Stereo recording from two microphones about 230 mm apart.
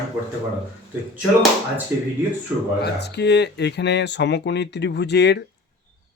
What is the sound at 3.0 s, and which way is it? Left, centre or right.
Speech, left.